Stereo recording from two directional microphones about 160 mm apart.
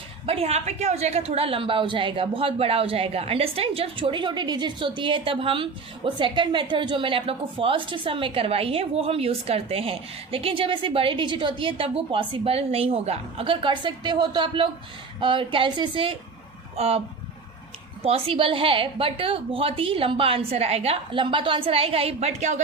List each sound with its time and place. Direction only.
0.3 s a woman's voice: 40° right (ahead or behind)
18.0 s a woman's voice: 35° right (ahead or behind)